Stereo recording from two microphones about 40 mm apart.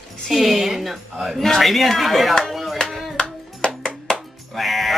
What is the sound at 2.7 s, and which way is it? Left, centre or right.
Music, centre.